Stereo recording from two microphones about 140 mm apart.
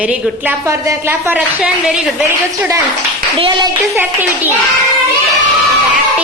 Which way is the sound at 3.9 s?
15° right (ahead or behind).